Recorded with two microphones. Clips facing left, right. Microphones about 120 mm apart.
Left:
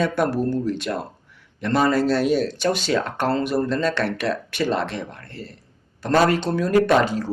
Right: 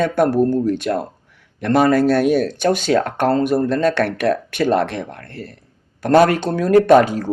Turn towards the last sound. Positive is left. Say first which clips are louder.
# right 6 dB
turn(degrees=-50)  # may be behind; listen again after turning